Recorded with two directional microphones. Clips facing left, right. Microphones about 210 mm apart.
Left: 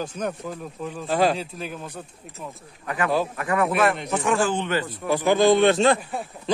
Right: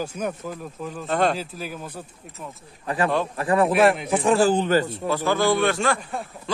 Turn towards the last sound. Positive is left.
turn(degrees=0)  # may be behind; listen again after turning